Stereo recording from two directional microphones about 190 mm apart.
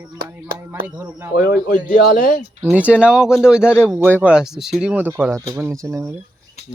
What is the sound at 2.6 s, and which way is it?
Speech, 5° right (ahead or behind).